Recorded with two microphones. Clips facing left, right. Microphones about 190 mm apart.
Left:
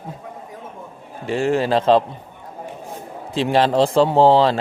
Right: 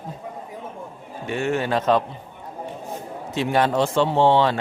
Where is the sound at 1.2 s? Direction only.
30° left (ahead or behind).